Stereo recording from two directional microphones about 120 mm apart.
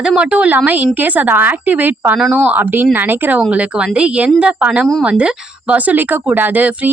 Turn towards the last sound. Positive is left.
turn(degrees=-15)  # may be behind; listen again after turning